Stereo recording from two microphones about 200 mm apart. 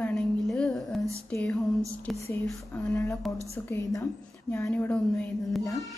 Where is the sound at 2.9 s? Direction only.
15° left (ahead or behind).